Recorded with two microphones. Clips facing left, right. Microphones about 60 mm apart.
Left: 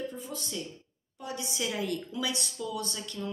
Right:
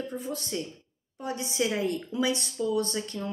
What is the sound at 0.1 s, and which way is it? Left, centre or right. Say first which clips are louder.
A woman's voice: right 5 dB; right.